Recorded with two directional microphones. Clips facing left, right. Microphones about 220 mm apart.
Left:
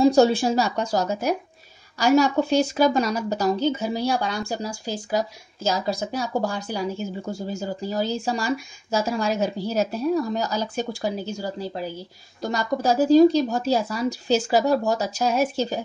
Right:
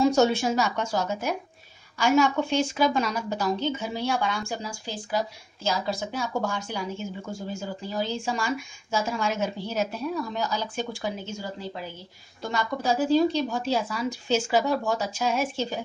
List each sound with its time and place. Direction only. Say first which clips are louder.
0.0 s speech: left 4 dB; 35° left (ahead or behind)